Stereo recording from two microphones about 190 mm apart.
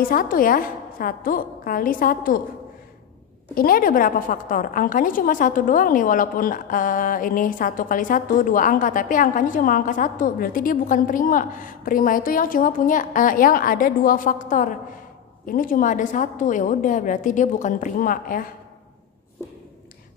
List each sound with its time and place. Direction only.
0.1 s a woman's voice: 45° left (ahead or behind)
3.5 s a woman's voice: 50° left (ahead or behind)